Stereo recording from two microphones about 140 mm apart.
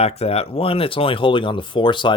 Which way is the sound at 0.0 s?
45° left (ahead or behind).